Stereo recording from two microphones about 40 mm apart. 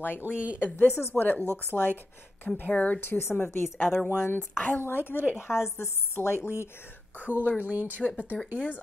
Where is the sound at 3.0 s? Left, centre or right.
Left.